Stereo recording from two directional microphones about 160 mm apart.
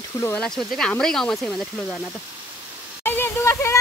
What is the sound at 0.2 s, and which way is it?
Speech, 10° left (ahead or behind).